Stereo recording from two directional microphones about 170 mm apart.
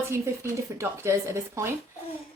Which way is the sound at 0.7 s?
15° right (ahead or behind).